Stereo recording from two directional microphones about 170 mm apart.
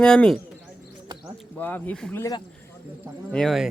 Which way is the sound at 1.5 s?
10° left (ahead or behind).